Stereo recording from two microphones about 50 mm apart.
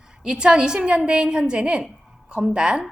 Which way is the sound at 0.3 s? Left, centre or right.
Centre.